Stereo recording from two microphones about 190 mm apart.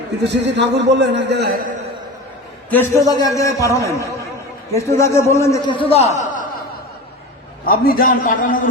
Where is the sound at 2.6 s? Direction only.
10° left (ahead or behind); by 6.4 s 40° left (ahead or behind).